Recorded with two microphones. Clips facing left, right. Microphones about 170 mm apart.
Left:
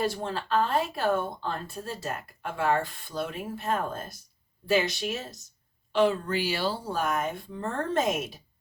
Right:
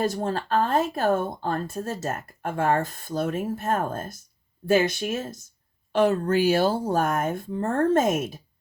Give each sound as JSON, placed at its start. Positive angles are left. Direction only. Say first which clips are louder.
{"t": 0.0, "sound": "speech", "louder": "right 4 dB", "side_deg": -45}